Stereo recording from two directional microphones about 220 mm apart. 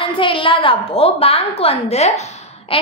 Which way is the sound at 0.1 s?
25° left (ahead or behind).